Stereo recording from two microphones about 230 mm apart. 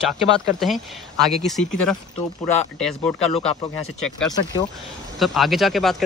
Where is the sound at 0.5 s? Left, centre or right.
Centre.